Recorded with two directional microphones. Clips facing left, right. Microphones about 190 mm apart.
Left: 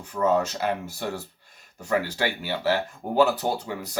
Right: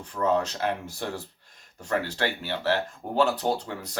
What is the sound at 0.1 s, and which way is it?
Speech, 5° left (ahead or behind).